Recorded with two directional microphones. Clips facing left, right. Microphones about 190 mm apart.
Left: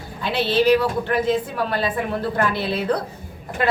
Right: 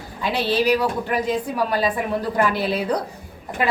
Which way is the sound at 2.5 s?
40° right (ahead or behind).